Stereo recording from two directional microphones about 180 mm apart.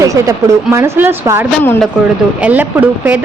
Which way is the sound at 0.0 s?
15° right (ahead or behind).